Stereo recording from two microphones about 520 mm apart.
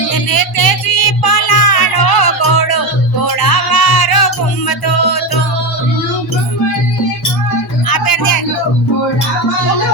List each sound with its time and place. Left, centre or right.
0.1 s music: left
7.9 s music: left